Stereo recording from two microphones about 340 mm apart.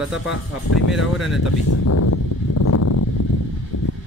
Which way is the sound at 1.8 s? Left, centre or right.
Left.